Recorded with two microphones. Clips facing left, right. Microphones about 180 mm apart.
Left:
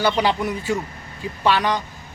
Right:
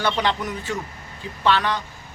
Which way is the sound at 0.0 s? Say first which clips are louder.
Left 3 dB; 10° left (ahead or behind).